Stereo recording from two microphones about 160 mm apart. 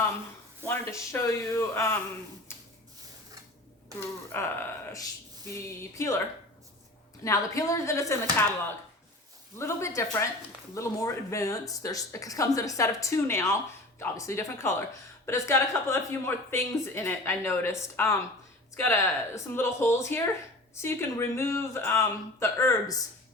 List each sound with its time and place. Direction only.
0.6 s speech: 15° left (ahead or behind)
2.5 s a sound: 15° left (ahead or behind)
4.3 s speech: 15° left (ahead or behind)
5.5 s speech: 15° left (ahead or behind)
7.3 s speech: 20° left (ahead or behind)
9.6 s speech: 15° left (ahead or behind)